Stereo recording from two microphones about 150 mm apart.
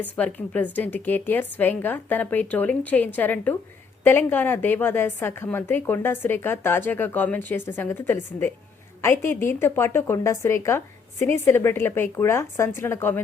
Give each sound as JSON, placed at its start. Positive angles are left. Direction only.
{"t": 0.0, "sound": "a woman's voice", "side_deg": 10}